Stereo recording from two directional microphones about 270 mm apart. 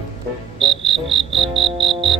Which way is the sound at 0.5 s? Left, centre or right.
Centre.